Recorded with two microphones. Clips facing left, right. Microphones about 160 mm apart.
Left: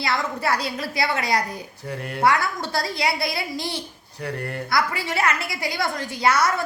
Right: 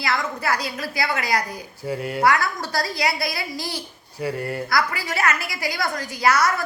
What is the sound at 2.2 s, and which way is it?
A woman's voice, 25° left (ahead or behind).